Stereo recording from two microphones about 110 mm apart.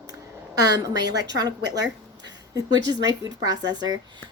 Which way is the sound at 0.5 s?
35° right (ahead or behind).